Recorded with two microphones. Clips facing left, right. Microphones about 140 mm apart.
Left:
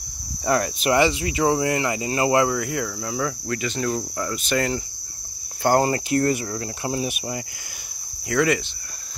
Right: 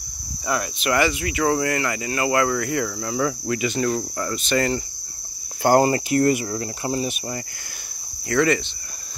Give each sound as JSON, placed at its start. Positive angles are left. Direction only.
{"t": 0.5, "sound": "speech", "side_deg": 35}
{"t": 2.5, "sound": "speech", "side_deg": 5}
{"t": 3.4, "sound": "speech", "side_deg": -10}
{"t": 3.8, "sound": "speech", "side_deg": 0}
{"t": 5.6, "sound": "speech", "side_deg": -10}